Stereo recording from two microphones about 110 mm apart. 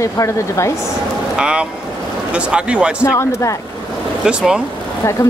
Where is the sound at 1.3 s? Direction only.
10° right (ahead or behind).